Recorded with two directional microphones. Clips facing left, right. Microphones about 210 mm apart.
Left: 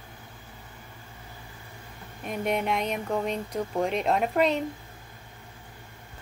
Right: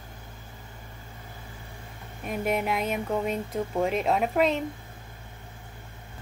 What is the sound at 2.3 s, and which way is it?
Speech, 5° right (ahead or behind).